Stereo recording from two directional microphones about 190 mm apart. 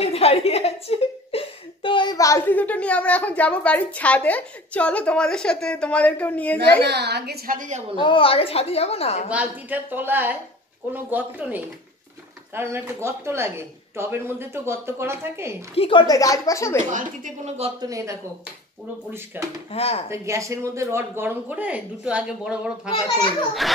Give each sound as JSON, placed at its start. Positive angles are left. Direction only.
{"t": 0.0, "sound": "speech", "side_deg": 30}
{"t": 6.8, "sound": "a woman's voice", "side_deg": -60}
{"t": 7.9, "sound": "a woman's voice", "side_deg": 25}
{"t": 9.3, "sound": "speech", "side_deg": -10}
{"t": 15.7, "sound": "speech", "side_deg": 30}
{"t": 16.9, "sound": "a woman's voice", "side_deg": -45}
{"t": 17.6, "sound": "speech", "side_deg": -20}
{"t": 19.4, "sound": "speech", "side_deg": -10}
{"t": 19.7, "sound": "a woman's voice", "side_deg": 30}
{"t": 20.1, "sound": "speech", "side_deg": -15}
{"t": 23.6, "sound": "speech", "side_deg": 0}